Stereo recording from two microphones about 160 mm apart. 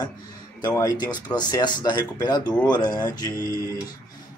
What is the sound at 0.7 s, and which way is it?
Speech, 20° left (ahead or behind).